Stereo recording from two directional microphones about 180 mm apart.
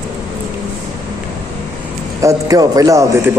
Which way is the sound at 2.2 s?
20° right (ahead or behind).